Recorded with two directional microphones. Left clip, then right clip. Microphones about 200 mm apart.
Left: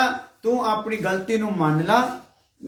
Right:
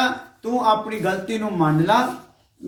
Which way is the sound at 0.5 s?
20° left (ahead or behind).